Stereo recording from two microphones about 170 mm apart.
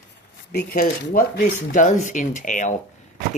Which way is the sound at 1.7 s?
50° left (ahead or behind).